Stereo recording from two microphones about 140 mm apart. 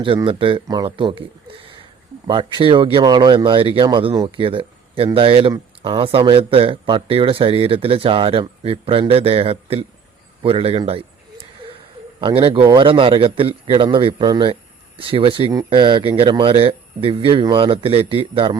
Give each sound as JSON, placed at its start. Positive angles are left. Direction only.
{"t": 0.3, "sound": "speech", "side_deg": -40}
{"t": 10.4, "sound": "a sound", "side_deg": -40}
{"t": 12.2, "sound": "speech", "side_deg": -40}